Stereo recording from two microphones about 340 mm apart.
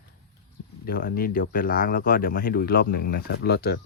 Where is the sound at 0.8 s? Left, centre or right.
Left.